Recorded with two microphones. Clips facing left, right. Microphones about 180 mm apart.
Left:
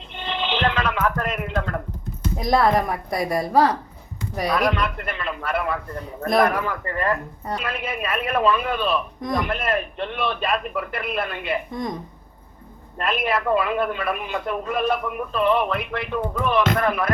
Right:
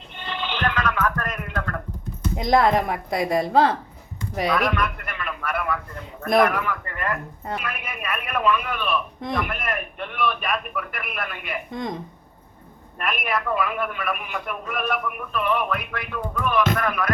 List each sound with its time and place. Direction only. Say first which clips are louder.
0.2 s a sound: left 3 dB; 20° left (ahead or behind)
2.4 s a woman's voice: even; 20° right (ahead or behind)
4.5 s a man's voice: left 4 dB; 25° left (ahead or behind)
13.0 s a man's voice: left 3 dB; 30° left (ahead or behind)